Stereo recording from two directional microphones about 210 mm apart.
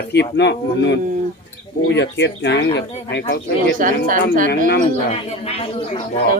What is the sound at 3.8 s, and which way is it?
Speech, 40° right (ahead or behind).